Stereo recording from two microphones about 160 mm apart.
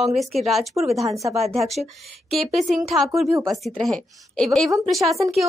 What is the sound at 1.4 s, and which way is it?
Speech, 40° right (ahead or behind).